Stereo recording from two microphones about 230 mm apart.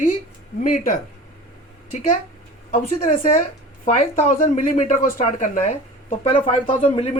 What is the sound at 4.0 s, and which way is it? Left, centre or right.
A woman's voice, left.